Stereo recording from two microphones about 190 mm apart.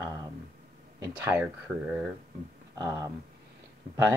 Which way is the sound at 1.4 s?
5° right (ahead or behind).